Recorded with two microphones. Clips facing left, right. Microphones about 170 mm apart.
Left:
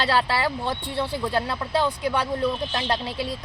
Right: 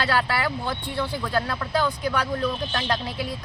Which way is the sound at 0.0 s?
30° left (ahead or behind).